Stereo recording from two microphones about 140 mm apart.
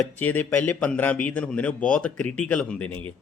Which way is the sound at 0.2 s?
10° left (ahead or behind).